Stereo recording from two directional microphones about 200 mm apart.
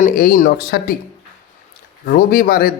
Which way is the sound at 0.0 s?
45° left (ahead or behind).